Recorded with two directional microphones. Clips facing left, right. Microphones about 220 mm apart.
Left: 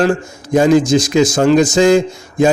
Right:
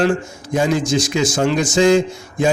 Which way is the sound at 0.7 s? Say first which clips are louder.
Left 7 dB; 90° left.